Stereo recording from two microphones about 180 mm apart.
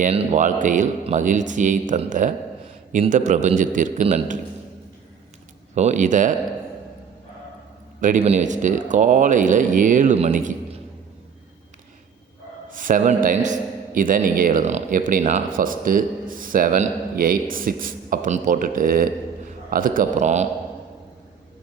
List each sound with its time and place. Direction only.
0.0 s a man's voice: 45° right (ahead or behind)
5.7 s a man's voice: 40° right (ahead or behind)
8.0 s a man's voice: 40° right (ahead or behind)
12.7 s a man's voice: 45° right (ahead or behind)